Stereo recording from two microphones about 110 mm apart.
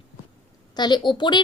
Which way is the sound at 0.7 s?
40° left (ahead or behind).